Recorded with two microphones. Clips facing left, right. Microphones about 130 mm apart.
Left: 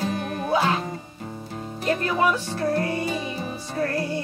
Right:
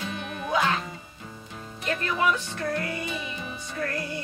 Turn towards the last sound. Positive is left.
turn(degrees=35)  # may be behind; listen again after turning